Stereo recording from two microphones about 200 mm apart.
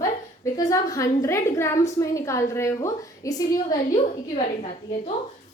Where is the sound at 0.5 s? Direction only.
15° left (ahead or behind).